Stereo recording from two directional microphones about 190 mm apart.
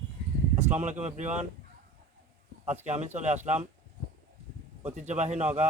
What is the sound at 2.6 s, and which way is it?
Speech, 35° right (ahead or behind).